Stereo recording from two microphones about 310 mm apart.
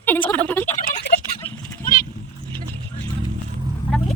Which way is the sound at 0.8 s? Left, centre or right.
Left.